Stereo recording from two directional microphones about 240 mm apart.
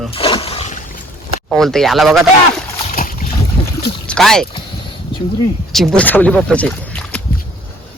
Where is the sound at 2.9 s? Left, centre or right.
Left.